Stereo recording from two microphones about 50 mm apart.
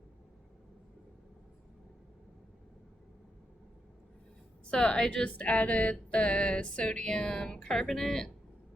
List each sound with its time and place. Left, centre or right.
4.7 s speech: centre